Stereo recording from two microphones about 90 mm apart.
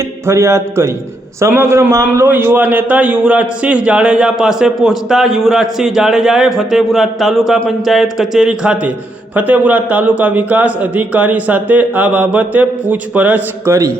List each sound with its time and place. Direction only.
0.3 s a man's voice: 30° right (ahead or behind)
13.7 s speech: 40° right (ahead or behind)